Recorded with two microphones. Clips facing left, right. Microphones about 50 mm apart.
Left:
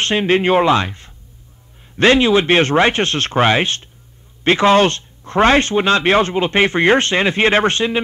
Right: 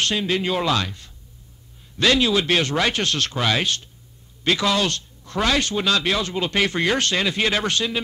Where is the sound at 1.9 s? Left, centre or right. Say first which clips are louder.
Left 7 dB; left.